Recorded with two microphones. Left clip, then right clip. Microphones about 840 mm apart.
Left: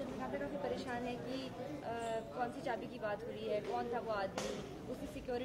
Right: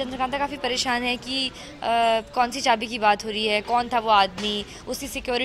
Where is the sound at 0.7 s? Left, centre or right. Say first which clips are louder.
Right 18 dB; right.